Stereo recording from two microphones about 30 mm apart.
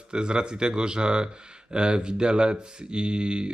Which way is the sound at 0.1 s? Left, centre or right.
Right.